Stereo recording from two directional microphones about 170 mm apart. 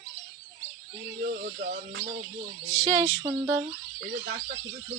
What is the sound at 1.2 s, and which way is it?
Speech, 50° right (ahead or behind).